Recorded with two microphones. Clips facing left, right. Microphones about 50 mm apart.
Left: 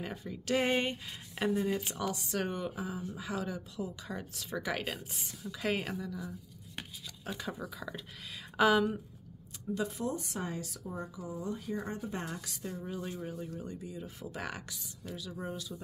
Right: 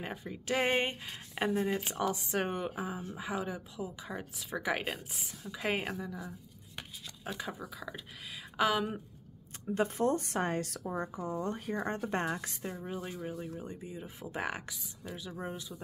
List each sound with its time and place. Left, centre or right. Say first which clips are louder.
0.1 s speech: left 2 dB; centre
3.2 s speech: right 2 dB; right; by 8.8 s centre
9.7 s speech: right 5 dB; right
12.3 s a woman's voice: right 4 dB; right
12.7 s speech: even; right